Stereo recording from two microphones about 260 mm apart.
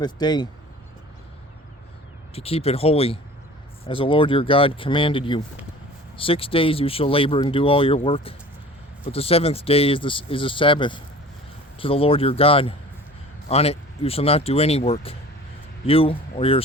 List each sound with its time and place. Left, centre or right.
0.0 s speech: centre
2.3 s speech: left